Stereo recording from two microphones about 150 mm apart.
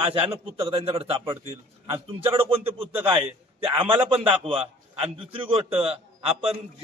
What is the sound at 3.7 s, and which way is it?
A man's voice, 35° right (ahead or behind).